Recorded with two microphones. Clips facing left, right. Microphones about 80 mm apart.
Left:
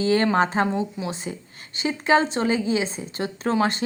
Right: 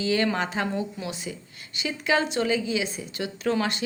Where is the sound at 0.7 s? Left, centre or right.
Left.